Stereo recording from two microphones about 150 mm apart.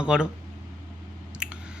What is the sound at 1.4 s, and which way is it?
Squish, 5° right (ahead or behind).